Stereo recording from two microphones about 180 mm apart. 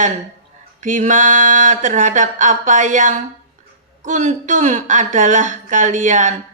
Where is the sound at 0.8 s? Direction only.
45° right (ahead or behind).